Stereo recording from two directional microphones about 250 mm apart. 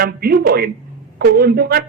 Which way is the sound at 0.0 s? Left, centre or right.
Right.